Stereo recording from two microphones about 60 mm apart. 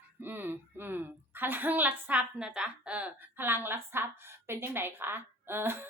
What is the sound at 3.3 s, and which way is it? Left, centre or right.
A woman's voice, right.